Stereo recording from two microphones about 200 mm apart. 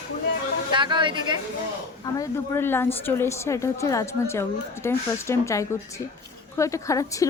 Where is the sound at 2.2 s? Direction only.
10° left (ahead or behind).